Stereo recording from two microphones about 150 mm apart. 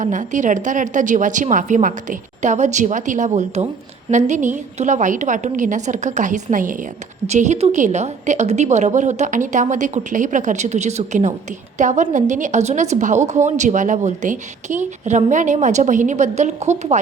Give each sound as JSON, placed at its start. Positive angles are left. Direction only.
{"t": 0.0, "sound": "a woman's voice", "side_deg": -55}
{"t": 7.3, "sound": "a woman's voice", "side_deg": -50}